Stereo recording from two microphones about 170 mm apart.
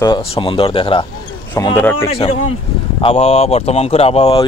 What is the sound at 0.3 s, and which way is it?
Speech, 30° left (ahead or behind).